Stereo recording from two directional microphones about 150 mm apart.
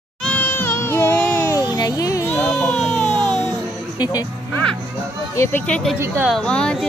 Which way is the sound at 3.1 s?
30° right (ahead or behind).